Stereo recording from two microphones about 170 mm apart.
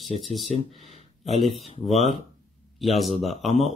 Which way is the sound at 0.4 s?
40° left (ahead or behind).